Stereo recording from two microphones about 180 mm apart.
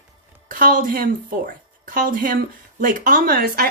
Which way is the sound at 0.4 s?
50° right (ahead or behind).